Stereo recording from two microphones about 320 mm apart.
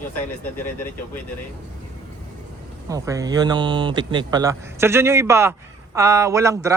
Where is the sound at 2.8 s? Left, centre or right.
Centre.